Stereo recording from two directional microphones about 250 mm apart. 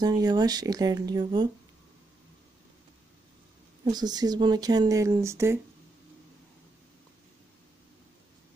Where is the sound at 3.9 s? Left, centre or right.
Centre.